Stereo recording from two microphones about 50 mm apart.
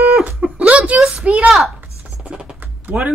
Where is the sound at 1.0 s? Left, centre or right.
Centre.